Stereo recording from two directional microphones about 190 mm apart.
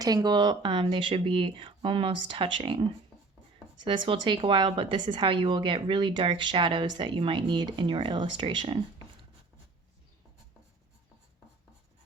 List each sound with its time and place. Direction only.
0.0 s a woman's voice: 20° right (ahead or behind)
3.8 s a woman's voice: 25° right (ahead or behind)